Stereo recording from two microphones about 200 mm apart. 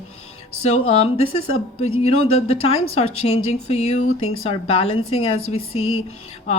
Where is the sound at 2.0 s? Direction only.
30° left (ahead or behind).